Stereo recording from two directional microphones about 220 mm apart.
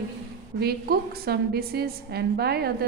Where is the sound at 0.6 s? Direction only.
45° right (ahead or behind).